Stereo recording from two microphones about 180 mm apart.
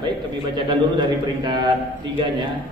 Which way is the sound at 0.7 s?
25° right (ahead or behind).